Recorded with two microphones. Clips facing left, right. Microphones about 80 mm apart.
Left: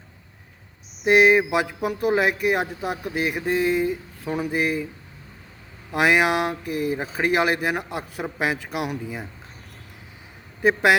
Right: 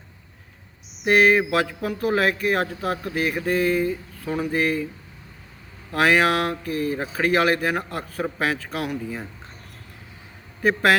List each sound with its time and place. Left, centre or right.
1.0 s speech: centre
5.9 s speech: centre
10.6 s speech: centre